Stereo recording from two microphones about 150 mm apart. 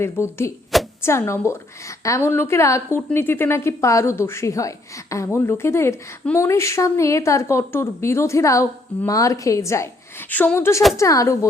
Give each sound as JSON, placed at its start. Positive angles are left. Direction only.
{"t": 0.0, "sound": "a woman's voice", "side_deg": 15}